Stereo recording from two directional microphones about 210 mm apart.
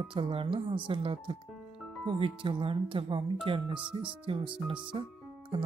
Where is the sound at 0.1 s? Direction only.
25° right (ahead or behind).